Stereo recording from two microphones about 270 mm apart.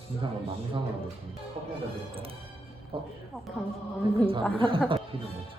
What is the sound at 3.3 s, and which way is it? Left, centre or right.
Speech, centre.